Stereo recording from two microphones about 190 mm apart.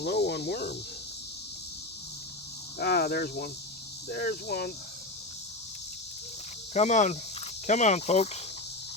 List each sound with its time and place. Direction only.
0.0 s speech: 60° left (ahead or behind)
2.7 s speech: 60° left (ahead or behind)
6.7 s cricket: 40° left (ahead or behind)